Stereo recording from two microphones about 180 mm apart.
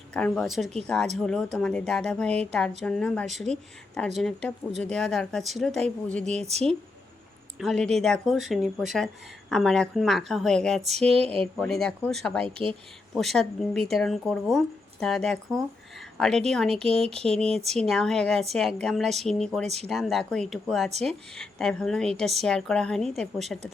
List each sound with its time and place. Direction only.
0.1 s a woman's voice: 5° left (ahead or behind)
7.6 s a woman's voice: centre (ahead or behind)
19.6 s speech: 35° right (ahead or behind)
19.9 s a woman's voice: centre (ahead or behind)